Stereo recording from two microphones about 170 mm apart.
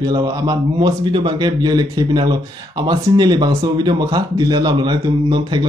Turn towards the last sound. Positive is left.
turn(degrees=-30)  # may be behind; listen again after turning